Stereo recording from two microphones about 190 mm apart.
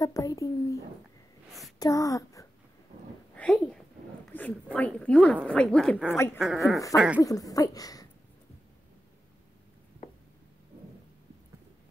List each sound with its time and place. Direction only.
0.0 s a sound: 20° left (ahead or behind)
1.8 s speech: 15° left (ahead or behind)
3.3 s a sound: 5° left (ahead or behind)
4.7 s a woman's voice: 5° left (ahead or behind)
6.1 s speech: 15° left (ahead or behind)
6.4 s a woman's voice: centre (ahead or behind)
7.2 s speech: 20° left (ahead or behind)